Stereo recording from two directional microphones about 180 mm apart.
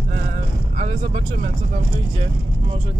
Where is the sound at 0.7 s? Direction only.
35° right (ahead or behind).